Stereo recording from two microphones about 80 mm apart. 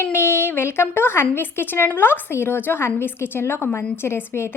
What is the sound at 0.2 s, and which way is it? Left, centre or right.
A woman's voice, left.